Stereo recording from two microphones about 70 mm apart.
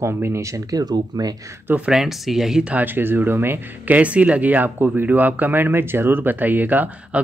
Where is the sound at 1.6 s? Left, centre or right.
Right.